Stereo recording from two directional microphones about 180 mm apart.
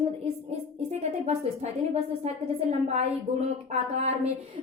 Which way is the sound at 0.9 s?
35° right (ahead or behind).